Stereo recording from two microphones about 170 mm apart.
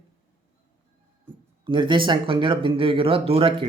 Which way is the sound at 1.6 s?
30° right (ahead or behind).